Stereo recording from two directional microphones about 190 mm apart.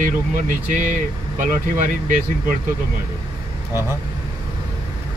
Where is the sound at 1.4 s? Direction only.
40° right (ahead or behind).